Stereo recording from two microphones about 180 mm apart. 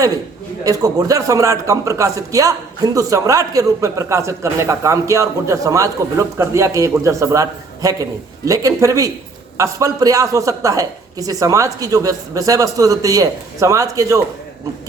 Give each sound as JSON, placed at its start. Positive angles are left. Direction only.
{"t": 0.6, "sound": "a man's voice", "side_deg": -20}